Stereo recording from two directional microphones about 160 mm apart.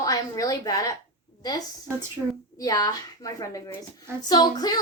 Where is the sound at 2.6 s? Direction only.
25° left (ahead or behind).